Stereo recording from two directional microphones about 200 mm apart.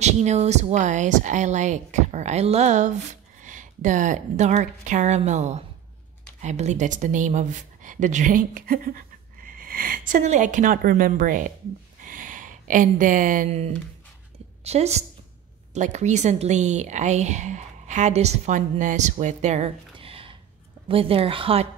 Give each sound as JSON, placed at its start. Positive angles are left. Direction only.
{"t": 0.0, "sound": "a woman's voice", "side_deg": -35}
{"t": 12.0, "sound": "a sound", "side_deg": -40}
{"t": 14.6, "sound": "a woman's voice", "side_deg": -30}